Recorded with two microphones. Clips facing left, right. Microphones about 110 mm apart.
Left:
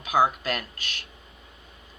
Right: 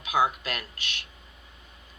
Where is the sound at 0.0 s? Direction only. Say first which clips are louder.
Left 3 dB; 40° left (ahead or behind).